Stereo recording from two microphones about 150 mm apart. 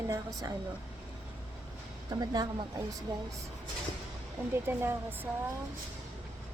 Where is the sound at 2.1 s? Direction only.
25° right (ahead or behind).